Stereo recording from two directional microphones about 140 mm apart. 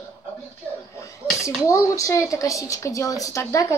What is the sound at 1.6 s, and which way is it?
A woman's voice, 25° left (ahead or behind).